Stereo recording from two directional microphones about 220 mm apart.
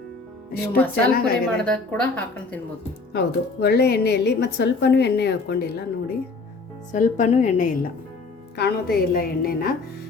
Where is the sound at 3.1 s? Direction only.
50° left (ahead or behind).